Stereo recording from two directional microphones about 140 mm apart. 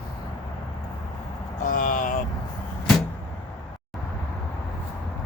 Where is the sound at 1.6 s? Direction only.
70° left (ahead or behind).